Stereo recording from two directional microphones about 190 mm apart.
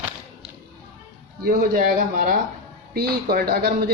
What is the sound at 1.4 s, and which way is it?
A woman's voice, 50° right (ahead or behind).